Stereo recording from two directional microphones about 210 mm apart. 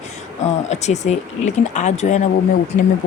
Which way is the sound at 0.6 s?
35° left (ahead or behind).